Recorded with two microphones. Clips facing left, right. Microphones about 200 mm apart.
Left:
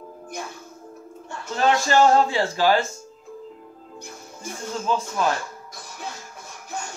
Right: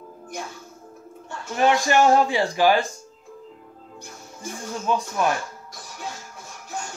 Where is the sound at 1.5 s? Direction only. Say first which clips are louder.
Right 1 dB; 15° right (ahead or behind).